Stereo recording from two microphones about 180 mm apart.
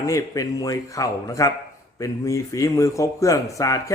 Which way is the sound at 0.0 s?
20° left (ahead or behind).